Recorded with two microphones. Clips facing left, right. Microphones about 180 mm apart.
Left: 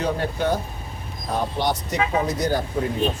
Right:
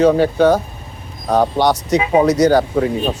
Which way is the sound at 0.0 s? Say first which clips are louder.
Right 12 dB; 90° right.